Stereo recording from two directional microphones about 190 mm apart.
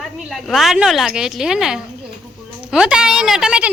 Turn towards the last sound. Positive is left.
turn(degrees=-5)  # may be behind; listen again after turning